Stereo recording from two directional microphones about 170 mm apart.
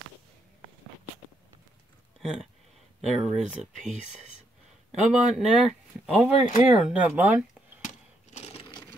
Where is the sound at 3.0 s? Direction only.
Centre (ahead or behind).